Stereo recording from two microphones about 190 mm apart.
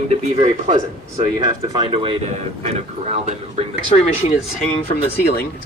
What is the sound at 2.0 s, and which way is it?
Speech, 30° right (ahead or behind).